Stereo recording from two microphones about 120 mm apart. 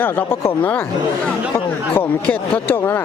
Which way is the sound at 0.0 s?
20° left (ahead or behind).